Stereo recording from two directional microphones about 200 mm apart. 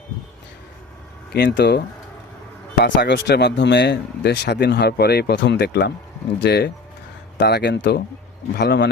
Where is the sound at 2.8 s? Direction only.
60° left (ahead or behind).